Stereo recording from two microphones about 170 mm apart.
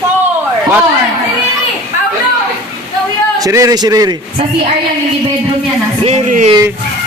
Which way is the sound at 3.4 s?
20° right (ahead or behind).